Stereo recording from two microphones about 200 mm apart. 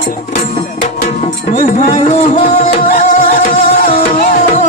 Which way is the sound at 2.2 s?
30° left (ahead or behind).